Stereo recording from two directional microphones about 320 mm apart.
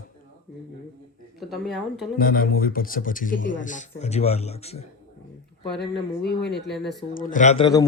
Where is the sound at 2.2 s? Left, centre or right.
Left.